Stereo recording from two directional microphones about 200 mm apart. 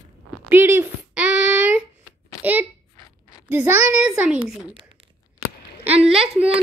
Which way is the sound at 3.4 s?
10° right (ahead or behind).